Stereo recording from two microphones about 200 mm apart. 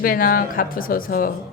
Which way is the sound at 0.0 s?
45° left (ahead or behind).